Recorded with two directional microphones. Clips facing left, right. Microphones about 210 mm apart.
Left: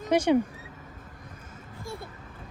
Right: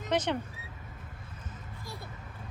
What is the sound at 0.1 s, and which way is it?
Speech, 10° left (ahead or behind).